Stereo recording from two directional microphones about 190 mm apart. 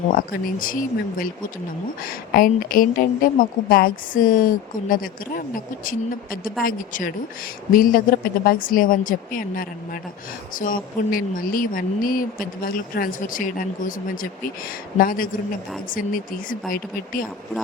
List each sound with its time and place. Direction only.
0.1 s a woman's voice: 50° left (ahead or behind)